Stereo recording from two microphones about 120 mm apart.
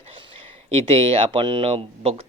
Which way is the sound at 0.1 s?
50° right (ahead or behind).